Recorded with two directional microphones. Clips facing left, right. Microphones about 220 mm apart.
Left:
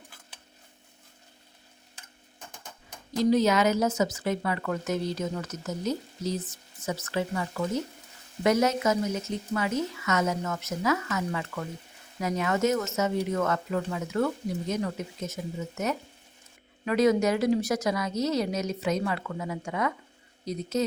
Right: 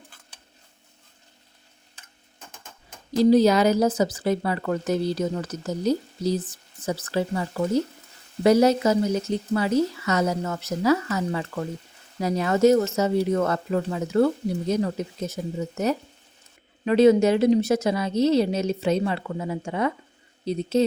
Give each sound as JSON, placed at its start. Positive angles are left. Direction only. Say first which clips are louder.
{"t": 3.2, "sound": "a woman's voice", "louder": "right 6 dB", "side_deg": -35}